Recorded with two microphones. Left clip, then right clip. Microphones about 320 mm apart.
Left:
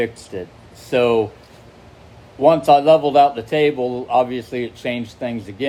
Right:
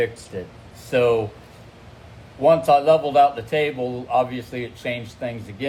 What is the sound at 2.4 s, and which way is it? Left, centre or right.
Speech, left.